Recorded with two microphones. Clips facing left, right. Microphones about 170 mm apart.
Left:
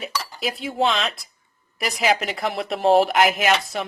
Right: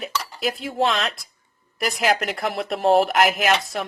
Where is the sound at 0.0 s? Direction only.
Centre (ahead or behind).